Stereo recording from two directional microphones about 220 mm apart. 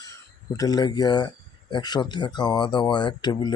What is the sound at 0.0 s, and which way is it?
Speech, 15° left (ahead or behind).